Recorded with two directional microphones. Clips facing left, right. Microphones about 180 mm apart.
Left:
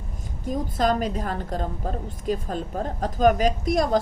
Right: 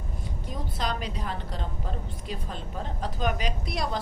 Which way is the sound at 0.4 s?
45° left (ahead or behind).